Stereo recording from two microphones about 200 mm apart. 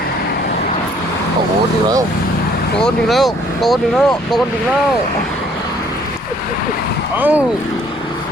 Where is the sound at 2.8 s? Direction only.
Centre (ahead or behind).